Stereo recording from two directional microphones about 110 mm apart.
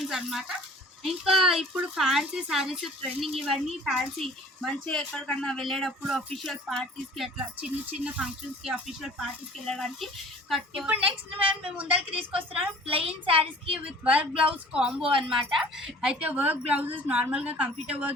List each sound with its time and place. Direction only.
0.0 s speech: centre (ahead or behind)
12.5 s a woman's voice: 60° right (ahead or behind)
14.0 s a woman's voice: 10° right (ahead or behind)